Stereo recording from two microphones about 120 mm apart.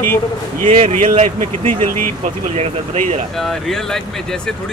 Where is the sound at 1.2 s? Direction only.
90° right; by 3.2 s 70° right (ahead or behind).